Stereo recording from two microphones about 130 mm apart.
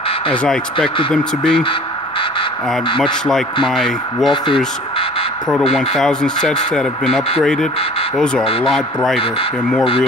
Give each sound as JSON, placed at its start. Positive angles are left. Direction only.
{"t": 0.3, "sound": "speech", "side_deg": 5}
{"t": 1.5, "sound": "speech", "side_deg": 40}
{"t": 3.6, "sound": "speech", "side_deg": 0}
{"t": 5.8, "sound": "speech", "side_deg": 5}
{"t": 8.6, "sound": "speech", "side_deg": 0}